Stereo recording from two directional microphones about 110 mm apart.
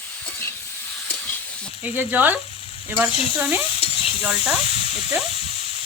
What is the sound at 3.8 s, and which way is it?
Stir, 60° left (ahead or behind).